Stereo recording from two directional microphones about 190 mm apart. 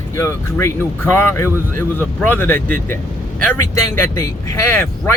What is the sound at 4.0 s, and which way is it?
Speech, 15° left (ahead or behind).